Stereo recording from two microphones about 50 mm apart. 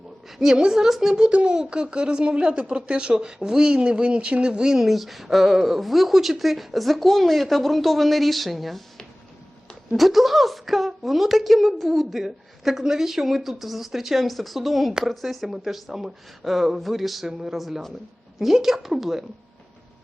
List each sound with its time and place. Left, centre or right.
0.3 s speech: centre
1.3 s speech: right; by 8.8 s centre
9.9 s a woman's voice: centre